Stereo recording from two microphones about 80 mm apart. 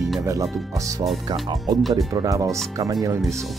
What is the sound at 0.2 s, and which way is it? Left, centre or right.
Speech, right.